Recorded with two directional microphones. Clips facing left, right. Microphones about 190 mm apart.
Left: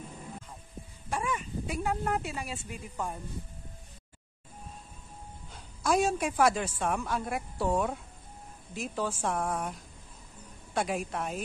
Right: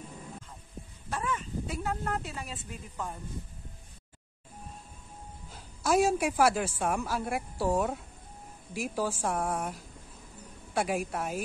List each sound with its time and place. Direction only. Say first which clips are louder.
1.1 s speech: left 1 dB; 15° left (ahead or behind)
5.5 s a woman's voice: right 1 dB; 5° right (ahead or behind)